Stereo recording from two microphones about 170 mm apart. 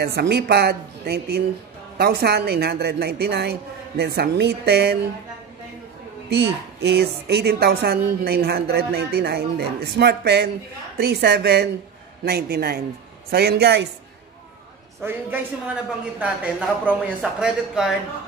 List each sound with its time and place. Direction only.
0.0 s a woman's voice: 70° right (ahead or behind)
6.3 s a woman's voice: 75° right (ahead or behind)
15.0 s a man's voice: 15° right (ahead or behind)